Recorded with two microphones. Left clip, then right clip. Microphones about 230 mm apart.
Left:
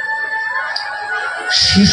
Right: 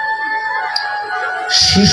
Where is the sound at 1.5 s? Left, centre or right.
Right.